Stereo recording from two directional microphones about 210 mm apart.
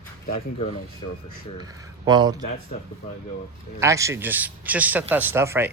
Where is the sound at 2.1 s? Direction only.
20° right (ahead or behind).